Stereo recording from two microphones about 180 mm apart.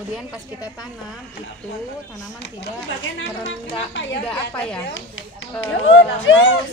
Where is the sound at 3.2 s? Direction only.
90° left.